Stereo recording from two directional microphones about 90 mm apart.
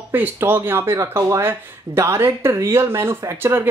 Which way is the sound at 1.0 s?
35° right (ahead or behind).